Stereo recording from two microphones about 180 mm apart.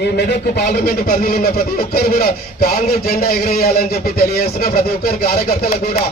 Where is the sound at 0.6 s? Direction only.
55° left (ahead or behind).